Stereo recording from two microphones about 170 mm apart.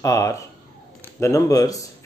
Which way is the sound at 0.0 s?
20° left (ahead or behind).